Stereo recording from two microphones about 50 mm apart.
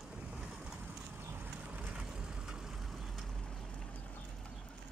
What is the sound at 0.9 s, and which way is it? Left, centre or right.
Vehicle, right.